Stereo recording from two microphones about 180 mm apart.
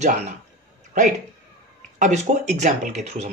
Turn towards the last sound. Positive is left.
turn(degrees=-40)  # may be behind; listen again after turning